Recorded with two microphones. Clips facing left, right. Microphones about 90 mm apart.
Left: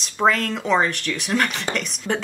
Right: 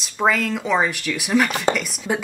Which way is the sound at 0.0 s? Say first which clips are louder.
Even; 5° right (ahead or behind).